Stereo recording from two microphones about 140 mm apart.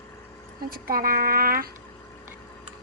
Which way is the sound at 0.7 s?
90° right.